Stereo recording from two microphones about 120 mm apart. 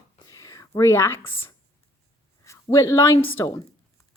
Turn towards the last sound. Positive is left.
turn(degrees=25)  # may be behind; listen again after turning